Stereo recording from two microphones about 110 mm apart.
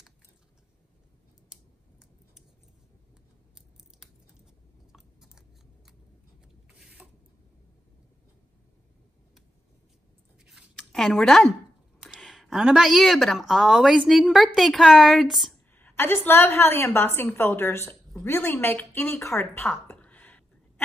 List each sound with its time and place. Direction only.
4.9 s chewing: 5° right (ahead or behind)
10.4 s scissors: centre (ahead or behind)
12.0 s speech: centre (ahead or behind)
15.7 s a woman's voice: 20° left (ahead or behind)